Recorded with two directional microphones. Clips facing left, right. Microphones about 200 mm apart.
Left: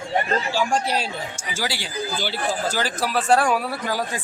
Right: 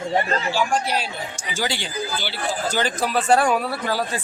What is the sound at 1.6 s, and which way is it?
A man's voice, 5° left (ahead or behind).